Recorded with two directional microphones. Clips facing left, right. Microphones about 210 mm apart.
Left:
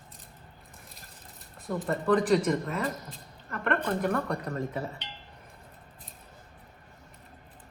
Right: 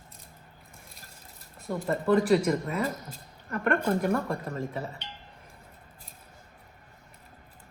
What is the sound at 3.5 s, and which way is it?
Speech, 45° right (ahead or behind).